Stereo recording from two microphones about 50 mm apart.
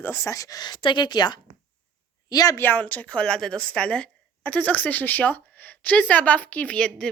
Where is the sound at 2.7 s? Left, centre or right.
Left.